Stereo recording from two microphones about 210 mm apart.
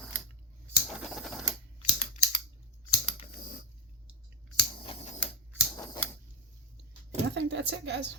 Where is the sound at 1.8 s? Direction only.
40° left (ahead or behind).